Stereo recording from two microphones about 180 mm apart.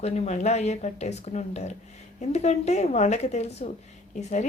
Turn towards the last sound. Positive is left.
turn(degrees=40)  # may be behind; listen again after turning